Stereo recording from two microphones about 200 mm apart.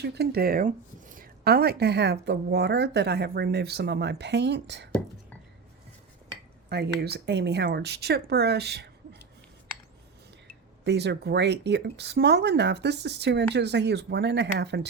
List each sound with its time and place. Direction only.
0.0 s speech: 55° right (ahead or behind)
6.7 s speech: 55° right (ahead or behind)
10.8 s speech: 60° right (ahead or behind)